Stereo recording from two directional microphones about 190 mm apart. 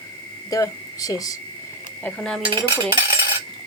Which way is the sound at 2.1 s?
5° left (ahead or behind).